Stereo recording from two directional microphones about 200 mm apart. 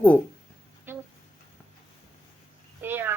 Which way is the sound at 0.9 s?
10° right (ahead or behind).